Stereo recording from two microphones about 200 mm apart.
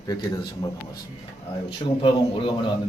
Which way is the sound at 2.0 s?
25° left (ahead or behind).